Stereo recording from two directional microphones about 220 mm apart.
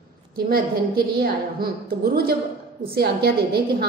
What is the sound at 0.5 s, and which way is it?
A woman's voice, 45° right (ahead or behind).